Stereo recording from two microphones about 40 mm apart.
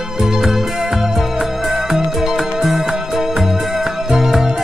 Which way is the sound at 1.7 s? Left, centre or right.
Centre.